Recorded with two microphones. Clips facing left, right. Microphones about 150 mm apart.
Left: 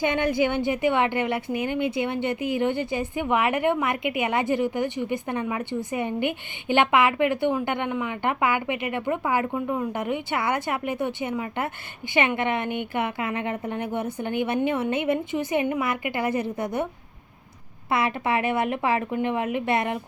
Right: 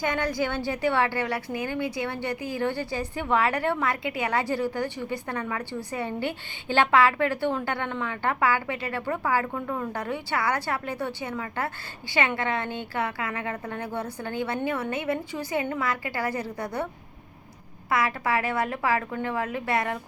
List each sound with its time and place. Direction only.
0.0 s a woman's voice: 20° left (ahead or behind)
17.9 s a woman's voice: 25° left (ahead or behind)